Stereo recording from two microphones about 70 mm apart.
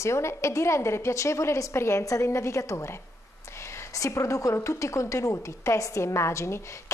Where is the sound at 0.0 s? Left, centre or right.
Left.